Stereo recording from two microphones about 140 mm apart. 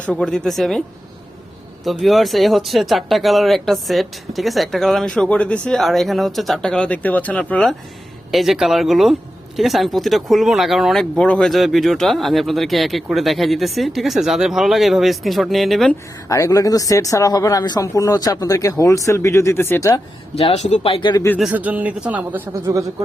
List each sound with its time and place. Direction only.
0.1 s speech: 5° left (ahead or behind)
1.8 s speech: centre (ahead or behind)
16.3 s speech: 25° left (ahead or behind)
20.3 s speech: 45° left (ahead or behind)
21.3 s speech: 10° right (ahead or behind)